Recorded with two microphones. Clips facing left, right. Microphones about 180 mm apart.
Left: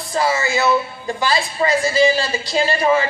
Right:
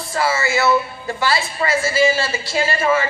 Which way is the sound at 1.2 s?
20° left (ahead or behind).